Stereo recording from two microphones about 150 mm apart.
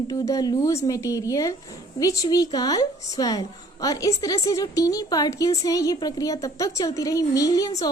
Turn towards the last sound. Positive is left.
turn(degrees=25)  # may be behind; listen again after turning